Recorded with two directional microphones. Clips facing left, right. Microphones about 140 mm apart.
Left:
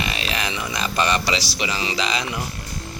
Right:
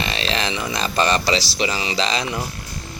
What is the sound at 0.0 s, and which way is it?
Speech, 30° right (ahead or behind).